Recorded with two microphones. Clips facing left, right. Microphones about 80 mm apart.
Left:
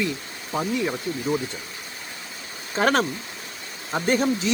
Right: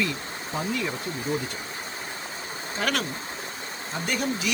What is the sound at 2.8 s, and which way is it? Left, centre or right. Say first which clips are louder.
Speech: left 7 dB; left.